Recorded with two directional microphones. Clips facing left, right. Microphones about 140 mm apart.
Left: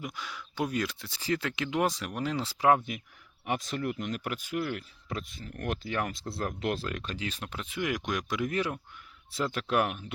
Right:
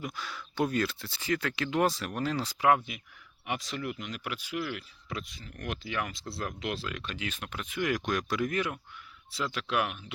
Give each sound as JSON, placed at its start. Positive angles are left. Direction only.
{"t": 0.0, "sound": "speech", "side_deg": 15}
{"t": 1.2, "sound": "speech", "side_deg": 30}
{"t": 3.4, "sound": "speech", "side_deg": 45}
{"t": 9.3, "sound": "speech", "side_deg": 45}